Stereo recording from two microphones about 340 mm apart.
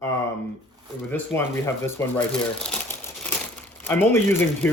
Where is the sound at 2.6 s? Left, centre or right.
Centre.